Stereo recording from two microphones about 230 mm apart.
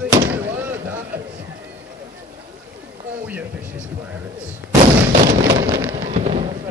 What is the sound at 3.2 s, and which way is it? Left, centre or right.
Speech, centre.